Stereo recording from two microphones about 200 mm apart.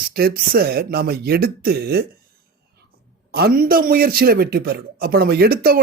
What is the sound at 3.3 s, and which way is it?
Speech, 50° right (ahead or behind).